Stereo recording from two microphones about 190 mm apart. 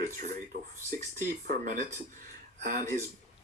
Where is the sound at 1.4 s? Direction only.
45° right (ahead or behind).